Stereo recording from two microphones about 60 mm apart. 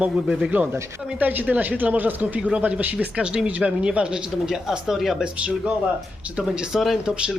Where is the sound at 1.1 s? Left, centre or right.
Right.